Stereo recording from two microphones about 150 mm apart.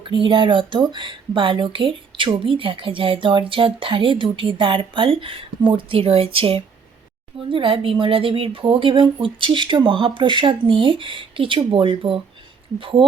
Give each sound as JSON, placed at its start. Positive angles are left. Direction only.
{"t": 0.1, "sound": "speech", "side_deg": -35}